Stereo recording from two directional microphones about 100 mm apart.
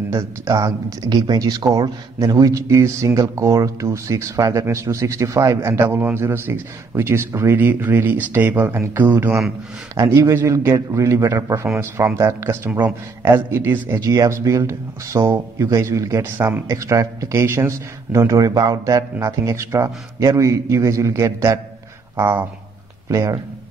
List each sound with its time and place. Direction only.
0.1 s speech: 30° right (ahead or behind)
10.0 s a man's voice: 30° right (ahead or behind)
23.0 s speech: 30° right (ahead or behind)